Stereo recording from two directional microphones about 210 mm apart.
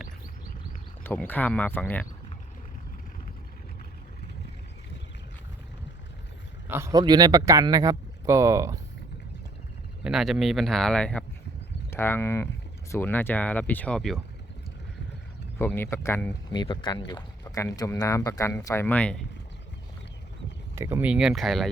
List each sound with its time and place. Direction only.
1.0 s speech: 10° left (ahead or behind)
6.7 s speech: 10° right (ahead or behind)
10.0 s speech: centre (ahead or behind)
15.5 s speech: 10° left (ahead or behind)
16.6 s speech: 20° left (ahead or behind); by 19.2 s 5° left (ahead or behind)
20.7 s speech: 10° right (ahead or behind)